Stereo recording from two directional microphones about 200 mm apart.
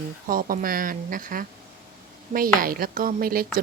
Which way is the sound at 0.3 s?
45° right (ahead or behind).